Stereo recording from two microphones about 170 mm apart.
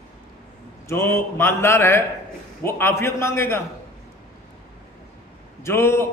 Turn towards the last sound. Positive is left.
turn(degrees=15)  # may be behind; listen again after turning